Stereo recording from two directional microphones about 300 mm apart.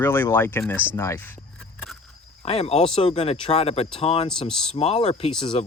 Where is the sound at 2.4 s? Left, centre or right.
Centre.